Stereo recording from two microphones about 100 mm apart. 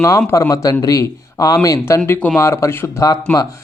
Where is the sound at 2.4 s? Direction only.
30° left (ahead or behind).